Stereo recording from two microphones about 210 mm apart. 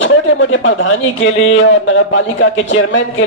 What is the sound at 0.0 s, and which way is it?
A man's voice, 65° left (ahead or behind).